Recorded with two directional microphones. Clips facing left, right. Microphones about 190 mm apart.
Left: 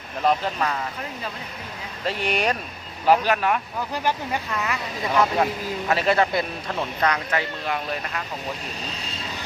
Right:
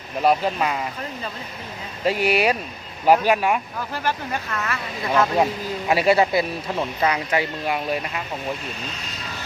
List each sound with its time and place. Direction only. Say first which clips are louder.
0.2 s speech: right 3 dB; 10° right (ahead or behind)
2.0 s speech: right 5 dB; 10° right (ahead or behind)
3.9 s speech: even; 15° left (ahead or behind)
5.9 s speech: right 3 dB; 10° right (ahead or behind)